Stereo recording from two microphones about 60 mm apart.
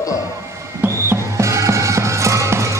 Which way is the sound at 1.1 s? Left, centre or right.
Right.